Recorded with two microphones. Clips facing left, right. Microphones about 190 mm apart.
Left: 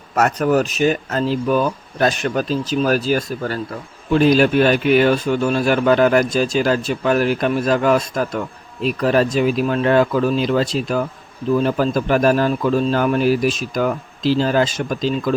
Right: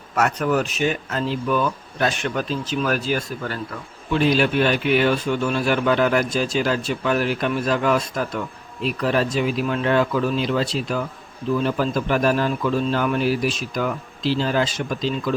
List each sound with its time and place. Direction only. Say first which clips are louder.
0.2 s a man's voice: left 4 dB; 40° left (ahead or behind)